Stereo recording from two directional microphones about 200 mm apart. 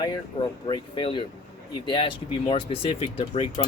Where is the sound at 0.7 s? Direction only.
25° left (ahead or behind).